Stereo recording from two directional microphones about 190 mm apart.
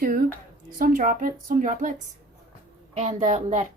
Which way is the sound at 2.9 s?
40° right (ahead or behind).